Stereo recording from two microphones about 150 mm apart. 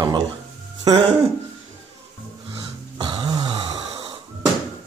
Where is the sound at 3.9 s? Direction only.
25° right (ahead or behind).